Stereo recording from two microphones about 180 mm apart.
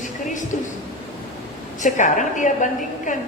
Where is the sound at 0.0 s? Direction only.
45° left (ahead or behind).